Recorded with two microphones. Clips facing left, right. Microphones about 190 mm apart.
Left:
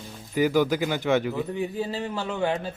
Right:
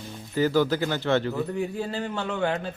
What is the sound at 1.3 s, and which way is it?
A man's voice, centre (ahead or behind).